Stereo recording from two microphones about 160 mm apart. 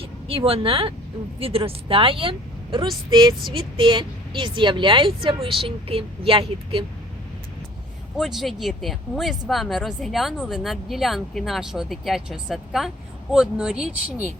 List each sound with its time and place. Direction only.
0.0 s a woman's voice: 35° right (ahead or behind)
8.2 s speech: centre (ahead or behind)